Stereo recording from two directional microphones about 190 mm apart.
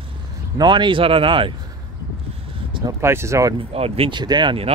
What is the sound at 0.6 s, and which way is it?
Speech, 25° right (ahead or behind).